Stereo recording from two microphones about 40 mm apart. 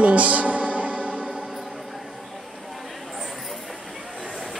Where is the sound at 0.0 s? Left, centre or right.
Right.